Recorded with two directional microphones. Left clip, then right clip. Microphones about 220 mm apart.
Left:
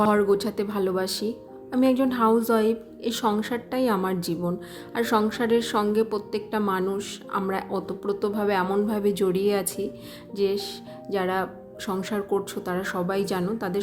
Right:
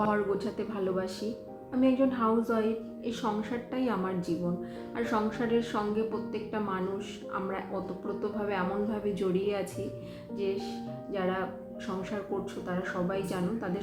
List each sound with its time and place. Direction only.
0.0 s a woman's voice: 50° left (ahead or behind)